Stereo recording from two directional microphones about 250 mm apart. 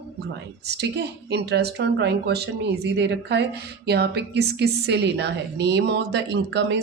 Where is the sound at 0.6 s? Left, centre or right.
Right.